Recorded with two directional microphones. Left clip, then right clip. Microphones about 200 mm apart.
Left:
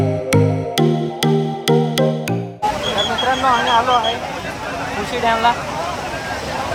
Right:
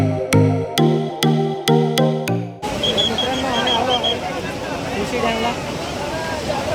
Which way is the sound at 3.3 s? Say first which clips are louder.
Left 4 dB; 20° left (ahead or behind).